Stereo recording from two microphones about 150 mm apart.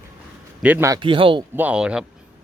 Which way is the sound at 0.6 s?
10° right (ahead or behind).